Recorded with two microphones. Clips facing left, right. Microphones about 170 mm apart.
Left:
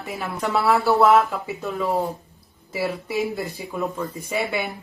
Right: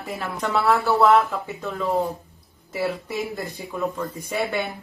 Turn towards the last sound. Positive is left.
turn(degrees=0)  # may be behind; listen again after turning